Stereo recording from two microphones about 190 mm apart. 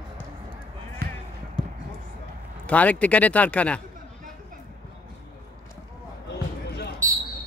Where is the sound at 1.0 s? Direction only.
60° right (ahead or behind).